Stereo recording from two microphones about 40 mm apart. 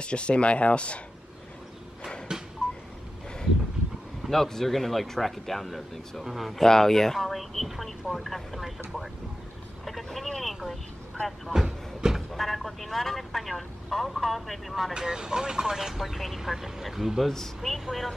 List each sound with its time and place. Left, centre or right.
0.0 s speech: left
4.3 s speech: centre
6.6 s speech: centre
10.4 s vehicle: centre
11.5 s a sound: centre
12.4 s speech: centre
15.0 s speech: centre
17.3 s speech: centre